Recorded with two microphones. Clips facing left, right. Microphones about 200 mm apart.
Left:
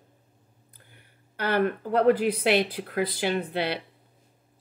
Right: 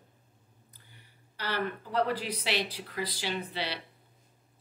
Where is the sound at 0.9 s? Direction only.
55° left (ahead or behind).